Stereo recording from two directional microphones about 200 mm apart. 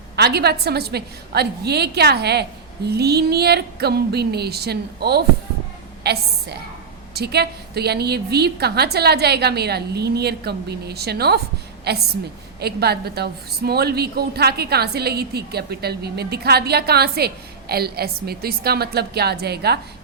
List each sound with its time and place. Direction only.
0.2 s a woman's voice: 55° right (ahead or behind)